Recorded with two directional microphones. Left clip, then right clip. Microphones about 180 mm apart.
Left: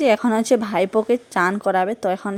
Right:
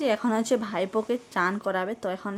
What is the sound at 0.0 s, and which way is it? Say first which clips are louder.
A woman's voice: left 8 dB; 35° left (ahead or behind).